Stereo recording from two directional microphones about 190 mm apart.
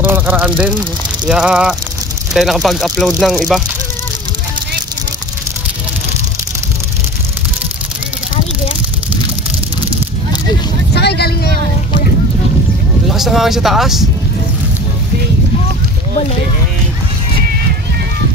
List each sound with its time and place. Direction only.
0.0 s vehicle: 10° right (ahead or behind)
0.6 s speech: 5° right (ahead or behind)
11.0 s vehicle: 60° left (ahead or behind)
13.1 s speech: centre (ahead or behind)